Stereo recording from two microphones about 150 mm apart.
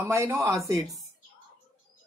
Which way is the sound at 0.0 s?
20° right (ahead or behind).